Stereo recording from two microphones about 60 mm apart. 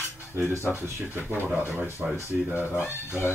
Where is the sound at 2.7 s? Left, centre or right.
Left.